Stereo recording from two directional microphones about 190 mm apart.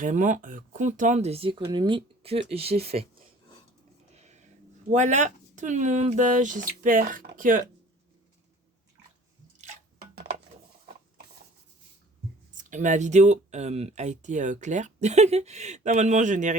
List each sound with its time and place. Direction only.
0.0 s speech: 45° right (ahead or behind)
4.9 s speech: 40° right (ahead or behind)
10.0 s a sound: 60° right (ahead or behind)
12.5 s speech: 40° right (ahead or behind)